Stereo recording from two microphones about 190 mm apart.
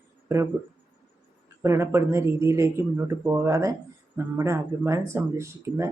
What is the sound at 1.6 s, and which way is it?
Speech, 15° right (ahead or behind).